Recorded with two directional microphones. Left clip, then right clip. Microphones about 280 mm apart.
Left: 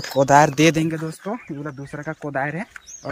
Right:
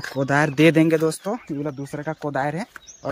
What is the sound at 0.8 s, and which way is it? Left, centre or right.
Speech, right.